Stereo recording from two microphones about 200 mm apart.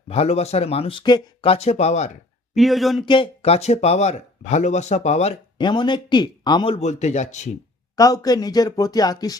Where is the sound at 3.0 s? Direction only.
25° left (ahead or behind).